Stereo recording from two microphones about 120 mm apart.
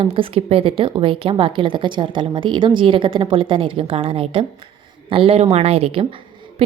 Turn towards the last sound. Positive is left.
turn(degrees=-45)  # may be behind; listen again after turning